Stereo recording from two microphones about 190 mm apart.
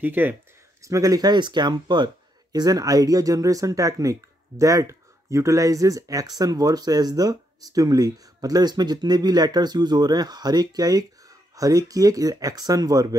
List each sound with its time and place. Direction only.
0.0 s speech: 10° right (ahead or behind)